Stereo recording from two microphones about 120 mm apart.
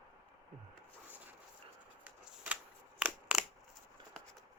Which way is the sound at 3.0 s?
10° right (ahead or behind).